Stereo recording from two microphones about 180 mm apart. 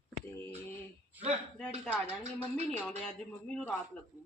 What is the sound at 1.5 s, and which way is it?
Speech, 5° left (ahead or behind).